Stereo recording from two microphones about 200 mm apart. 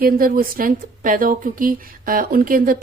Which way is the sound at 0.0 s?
45° right (ahead or behind).